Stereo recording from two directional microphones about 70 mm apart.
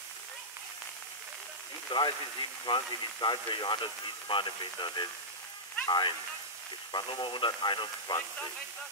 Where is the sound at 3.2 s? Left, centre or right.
Left.